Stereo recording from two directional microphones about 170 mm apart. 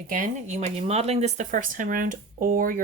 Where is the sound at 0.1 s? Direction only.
45° right (ahead or behind).